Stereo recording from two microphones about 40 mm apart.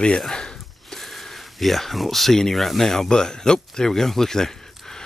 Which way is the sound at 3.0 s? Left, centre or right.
Centre.